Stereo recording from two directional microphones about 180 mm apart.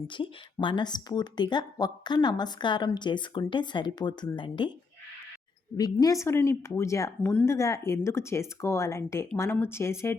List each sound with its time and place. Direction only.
0.1 s speech: 25° left (ahead or behind)
5.7 s a woman's voice: 20° left (ahead or behind)